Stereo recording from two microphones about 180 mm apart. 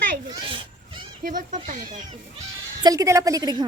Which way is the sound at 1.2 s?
45° right (ahead or behind).